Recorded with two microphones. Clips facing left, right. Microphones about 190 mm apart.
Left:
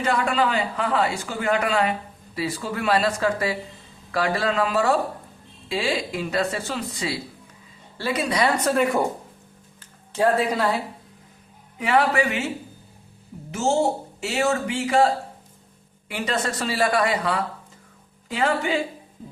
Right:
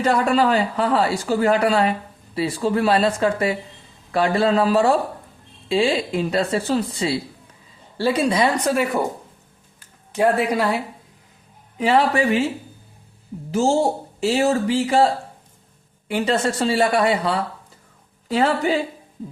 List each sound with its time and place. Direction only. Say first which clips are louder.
0.0 s a man's voice: right 4 dB; 35° right (ahead or behind)
8.7 s a woman's voice: even; 10° right (ahead or behind)
10.1 s a woman's voice: right 2 dB; 15° right (ahead or behind)
11.8 s a man's voice: right 3 dB; 30° right (ahead or behind)
13.5 s a woman's voice: right 3 dB; 35° right (ahead or behind)